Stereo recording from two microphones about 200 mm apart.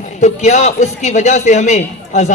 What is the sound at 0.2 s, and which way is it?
A man's voice, 35° left (ahead or behind).